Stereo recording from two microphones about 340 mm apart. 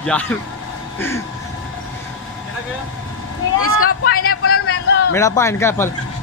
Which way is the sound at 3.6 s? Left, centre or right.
Left.